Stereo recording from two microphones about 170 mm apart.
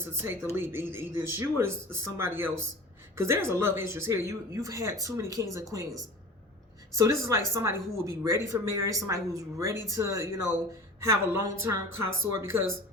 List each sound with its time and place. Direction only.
0.0 s speech: 15° right (ahead or behind)
6.9 s speech: 20° right (ahead or behind)